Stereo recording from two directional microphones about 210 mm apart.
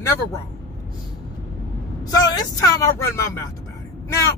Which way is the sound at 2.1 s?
15° left (ahead or behind).